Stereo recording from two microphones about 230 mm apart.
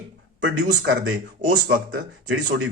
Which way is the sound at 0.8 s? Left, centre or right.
Right.